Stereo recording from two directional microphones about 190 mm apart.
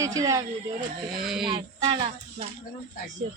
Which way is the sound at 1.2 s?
Centre (ahead or behind).